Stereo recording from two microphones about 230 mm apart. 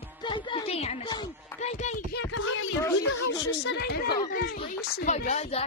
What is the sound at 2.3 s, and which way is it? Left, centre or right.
Speech, left.